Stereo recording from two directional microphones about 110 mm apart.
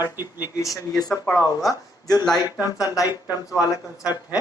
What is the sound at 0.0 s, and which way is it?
Speech, 20° right (ahead or behind).